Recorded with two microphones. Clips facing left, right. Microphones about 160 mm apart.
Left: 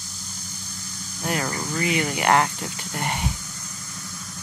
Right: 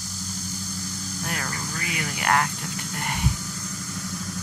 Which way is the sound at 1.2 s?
25° left (ahead or behind).